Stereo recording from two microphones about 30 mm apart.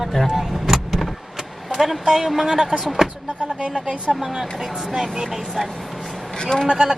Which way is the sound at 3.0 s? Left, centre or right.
Right.